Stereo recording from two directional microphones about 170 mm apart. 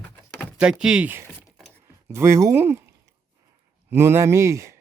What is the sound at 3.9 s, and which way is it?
Speech, 15° right (ahead or behind).